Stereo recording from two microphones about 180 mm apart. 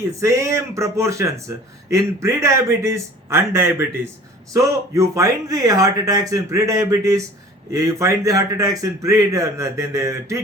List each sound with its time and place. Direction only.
0.2 s speech: 15° right (ahead or behind)